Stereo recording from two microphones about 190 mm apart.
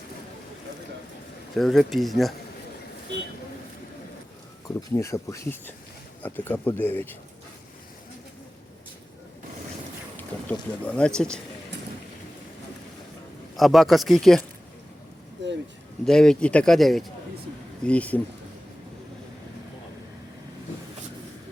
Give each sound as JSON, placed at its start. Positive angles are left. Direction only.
{"t": 1.5, "sound": "speech", "side_deg": 0}
{"t": 4.7, "sound": "speech", "side_deg": 15}
{"t": 10.2, "sound": "speech", "side_deg": 5}
{"t": 13.6, "sound": "speech", "side_deg": 0}
{"t": 15.4, "sound": "a sound", "side_deg": -70}
{"t": 16.0, "sound": "speech", "side_deg": 5}